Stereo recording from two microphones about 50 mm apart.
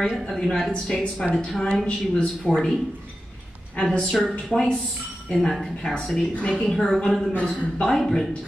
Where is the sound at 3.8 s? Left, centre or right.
Centre.